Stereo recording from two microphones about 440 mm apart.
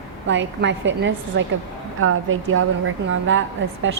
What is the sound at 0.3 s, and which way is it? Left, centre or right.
A woman's voice, right.